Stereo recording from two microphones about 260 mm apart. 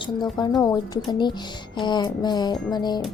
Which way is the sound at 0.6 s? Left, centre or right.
Centre.